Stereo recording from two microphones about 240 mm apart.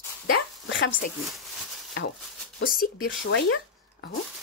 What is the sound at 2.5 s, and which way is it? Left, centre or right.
Speech, left.